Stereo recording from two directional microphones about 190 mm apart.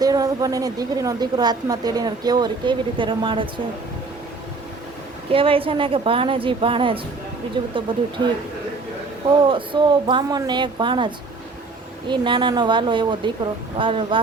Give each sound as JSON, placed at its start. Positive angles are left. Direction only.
{"t": 0.0, "sound": "a woman's voice", "side_deg": -20}
{"t": 5.3, "sound": "a woman's voice", "side_deg": -30}
{"t": 9.4, "sound": "a woman's voice", "side_deg": -25}